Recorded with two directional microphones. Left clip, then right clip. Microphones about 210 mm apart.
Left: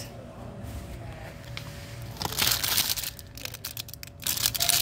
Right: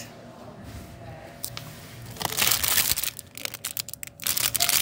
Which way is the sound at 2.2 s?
20° right (ahead or behind).